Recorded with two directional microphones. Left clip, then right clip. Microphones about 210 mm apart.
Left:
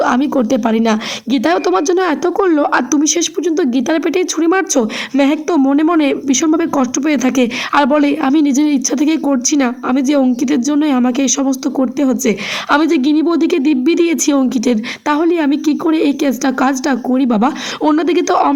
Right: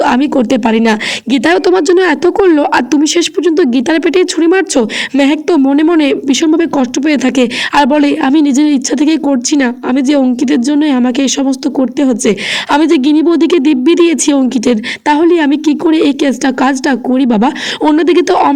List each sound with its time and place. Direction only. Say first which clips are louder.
0.0 s speech: right 3 dB; 25° right (ahead or behind)